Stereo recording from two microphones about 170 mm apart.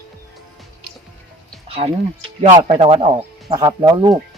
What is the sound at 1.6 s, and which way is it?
Music, 35° right (ahead or behind).